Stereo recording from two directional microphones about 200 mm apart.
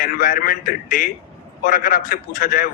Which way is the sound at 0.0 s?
40° left (ahead or behind).